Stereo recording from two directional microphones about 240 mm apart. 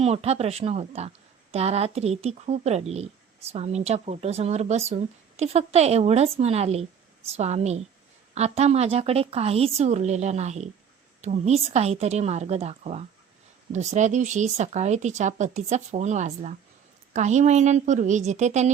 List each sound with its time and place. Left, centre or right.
0.0 s a woman's voice: right